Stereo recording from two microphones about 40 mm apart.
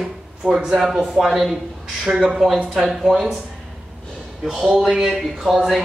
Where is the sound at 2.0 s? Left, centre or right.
Centre.